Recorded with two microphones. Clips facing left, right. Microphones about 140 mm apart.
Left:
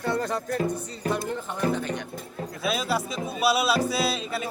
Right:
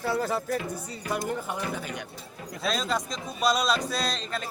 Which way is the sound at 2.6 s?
5° left (ahead or behind).